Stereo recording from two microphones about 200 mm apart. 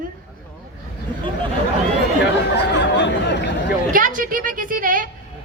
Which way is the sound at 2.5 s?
60° left (ahead or behind).